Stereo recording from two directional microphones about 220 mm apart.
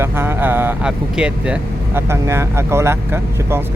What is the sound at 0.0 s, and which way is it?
Speech, 10° right (ahead or behind).